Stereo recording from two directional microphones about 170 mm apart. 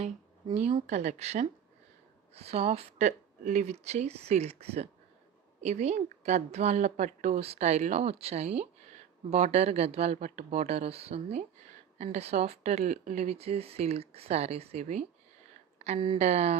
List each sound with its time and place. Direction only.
0.5 s speech: 40° right (ahead or behind)